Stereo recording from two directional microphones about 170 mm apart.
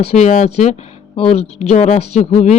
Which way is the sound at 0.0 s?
40° left (ahead or behind).